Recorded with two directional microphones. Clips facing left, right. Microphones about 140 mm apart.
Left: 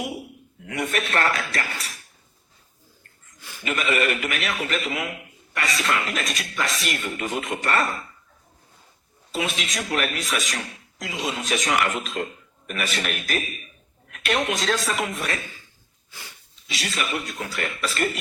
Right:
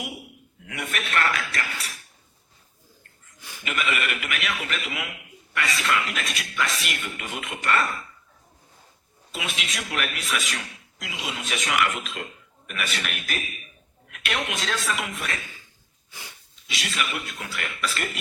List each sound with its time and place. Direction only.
0.0 s a man's voice: 35° left (ahead or behind)
3.6 s speech: 35° left (ahead or behind)
9.3 s speech: 35° left (ahead or behind)
16.6 s speech: 35° left (ahead or behind)